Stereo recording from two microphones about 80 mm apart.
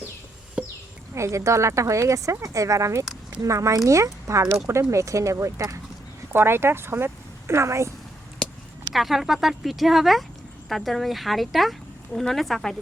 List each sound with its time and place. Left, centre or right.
1.1 s a woman's voice: right
6.3 s speech: right
8.9 s speech: centre